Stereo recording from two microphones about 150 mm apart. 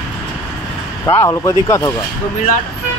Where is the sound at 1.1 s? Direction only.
25° left (ahead or behind).